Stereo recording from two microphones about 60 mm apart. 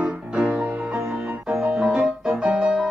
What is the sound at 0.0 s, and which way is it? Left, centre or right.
Music, right.